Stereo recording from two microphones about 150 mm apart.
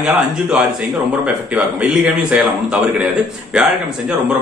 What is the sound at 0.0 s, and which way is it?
Speech, centre (ahead or behind).